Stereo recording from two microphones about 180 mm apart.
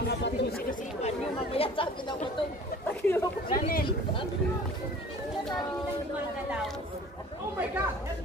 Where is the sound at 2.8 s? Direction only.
10° left (ahead or behind).